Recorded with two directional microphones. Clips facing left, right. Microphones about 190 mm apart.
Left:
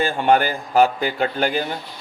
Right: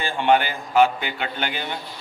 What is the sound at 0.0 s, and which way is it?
A man's voice, 40° left (ahead or behind).